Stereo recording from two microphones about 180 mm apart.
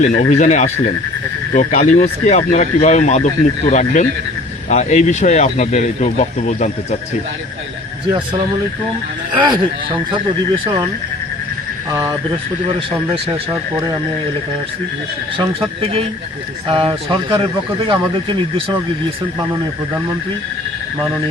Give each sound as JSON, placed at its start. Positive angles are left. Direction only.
{"t": 0.0, "sound": "speech", "side_deg": 40}
{"t": 9.5, "sound": "speech", "side_deg": -25}
{"t": 11.9, "sound": "speech", "side_deg": -15}
{"t": 13.5, "sound": "speech", "side_deg": -15}
{"t": 16.7, "sound": "speech", "side_deg": -30}